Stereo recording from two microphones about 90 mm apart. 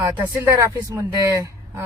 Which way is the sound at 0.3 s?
35° right (ahead or behind).